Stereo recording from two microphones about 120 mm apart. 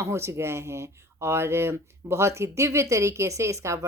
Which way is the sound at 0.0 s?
20° right (ahead or behind).